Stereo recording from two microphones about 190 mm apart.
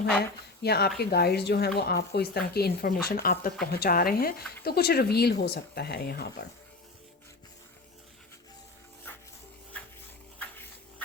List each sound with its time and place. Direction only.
0.6 s speech: 60° left (ahead or behind)